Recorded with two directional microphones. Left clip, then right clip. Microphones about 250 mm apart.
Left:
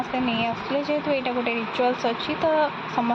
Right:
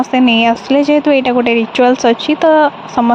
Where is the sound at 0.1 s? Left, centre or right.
Right.